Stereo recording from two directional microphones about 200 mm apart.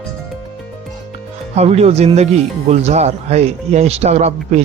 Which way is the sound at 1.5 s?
30° right (ahead or behind).